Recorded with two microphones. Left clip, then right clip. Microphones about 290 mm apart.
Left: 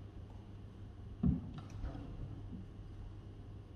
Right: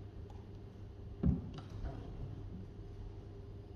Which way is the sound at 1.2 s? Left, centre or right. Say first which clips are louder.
Even; right.